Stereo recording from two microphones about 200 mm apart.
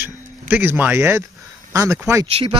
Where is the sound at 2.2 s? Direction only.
30° right (ahead or behind).